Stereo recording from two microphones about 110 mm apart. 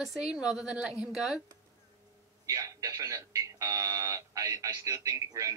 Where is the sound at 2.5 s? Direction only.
30° right (ahead or behind).